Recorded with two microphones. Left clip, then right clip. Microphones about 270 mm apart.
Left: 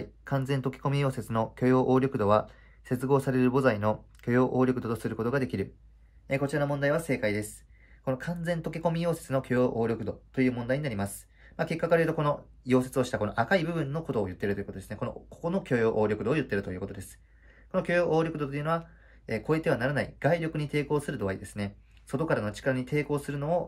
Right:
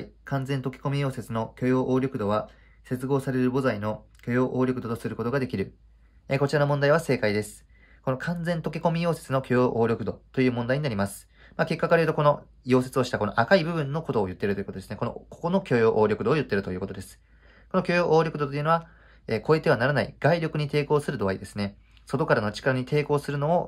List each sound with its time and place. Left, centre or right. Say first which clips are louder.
0.2 s speech: even; centre
6.2 s speech: right 5 dB; centre